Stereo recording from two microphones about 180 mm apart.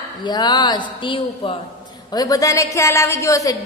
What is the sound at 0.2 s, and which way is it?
A woman's voice, 25° left (ahead or behind).